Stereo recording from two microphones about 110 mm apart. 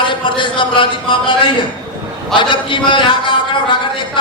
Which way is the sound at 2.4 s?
50° left (ahead or behind).